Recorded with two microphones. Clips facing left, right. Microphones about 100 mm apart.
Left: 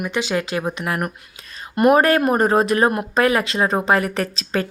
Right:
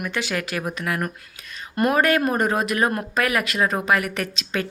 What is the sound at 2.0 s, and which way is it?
A woman's voice, 35° left (ahead or behind).